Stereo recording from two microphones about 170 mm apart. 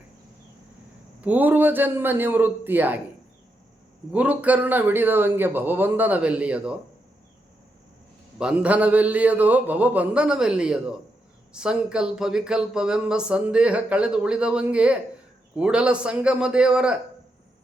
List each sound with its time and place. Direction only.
1.2 s a man's voice: 10° right (ahead or behind)
4.1 s a man's voice: 10° right (ahead or behind)
8.4 s a man's voice: 5° right (ahead or behind)